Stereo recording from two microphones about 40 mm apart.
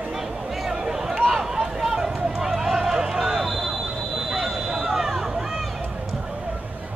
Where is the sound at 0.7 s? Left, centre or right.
Centre.